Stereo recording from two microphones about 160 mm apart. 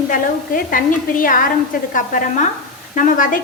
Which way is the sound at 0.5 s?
60° left (ahead or behind).